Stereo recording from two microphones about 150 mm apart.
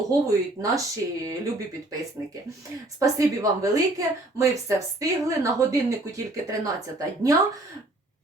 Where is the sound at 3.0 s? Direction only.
20° right (ahead or behind).